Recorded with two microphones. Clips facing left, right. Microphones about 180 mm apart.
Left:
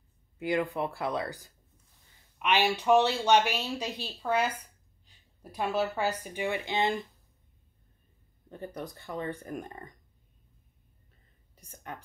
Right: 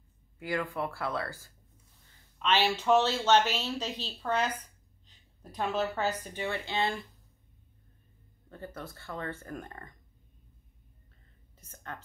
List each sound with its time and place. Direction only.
0.4 s speech: 20° left (ahead or behind)
4.6 s a sound: 10° left (ahead or behind)
6.2 s speech: 15° left (ahead or behind)
8.5 s speech: 15° left (ahead or behind)
11.5 s a woman's voice: 15° left (ahead or behind)